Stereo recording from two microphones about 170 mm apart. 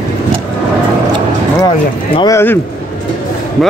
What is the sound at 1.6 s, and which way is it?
Speech, 25° left (ahead or behind).